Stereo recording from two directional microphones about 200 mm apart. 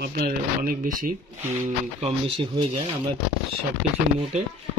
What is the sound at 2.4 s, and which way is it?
Speech, 25° right (ahead or behind).